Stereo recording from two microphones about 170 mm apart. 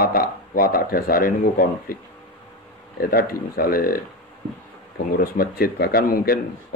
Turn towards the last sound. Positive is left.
turn(degrees=60)  # may be behind; listen again after turning